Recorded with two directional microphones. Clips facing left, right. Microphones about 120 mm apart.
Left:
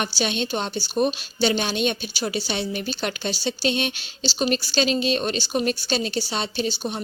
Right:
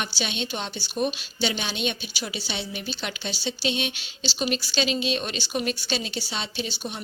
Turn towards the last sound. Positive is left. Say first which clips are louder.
# left 6 dB
turn(degrees=40)  # may be behind; listen again after turning